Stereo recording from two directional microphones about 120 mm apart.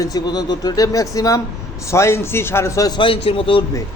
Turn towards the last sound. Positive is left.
turn(degrees=50)  # may be behind; listen again after turning